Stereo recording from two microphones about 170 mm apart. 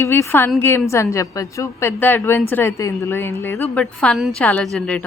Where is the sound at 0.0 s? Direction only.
15° left (ahead or behind).